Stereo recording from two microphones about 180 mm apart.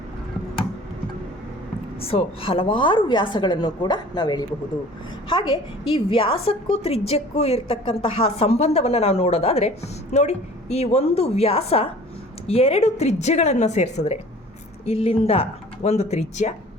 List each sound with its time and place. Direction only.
2.0 s a woman's voice: 30° left (ahead or behind)